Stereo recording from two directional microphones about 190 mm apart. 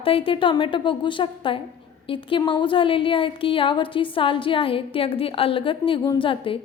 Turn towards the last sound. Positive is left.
turn(degrees=25)  # may be behind; listen again after turning